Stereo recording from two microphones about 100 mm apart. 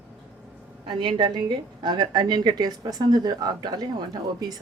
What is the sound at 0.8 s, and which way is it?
A woman's voice, 50° right (ahead or behind).